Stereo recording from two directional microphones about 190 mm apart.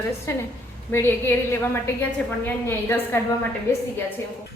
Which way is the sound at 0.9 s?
10° left (ahead or behind).